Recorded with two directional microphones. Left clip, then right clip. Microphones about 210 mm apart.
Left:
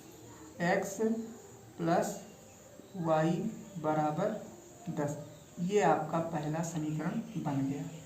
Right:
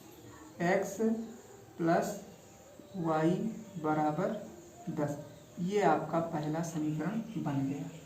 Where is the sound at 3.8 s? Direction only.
30° left (ahead or behind).